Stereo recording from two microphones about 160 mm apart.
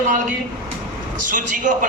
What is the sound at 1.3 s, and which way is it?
Speech, 55° right (ahead or behind).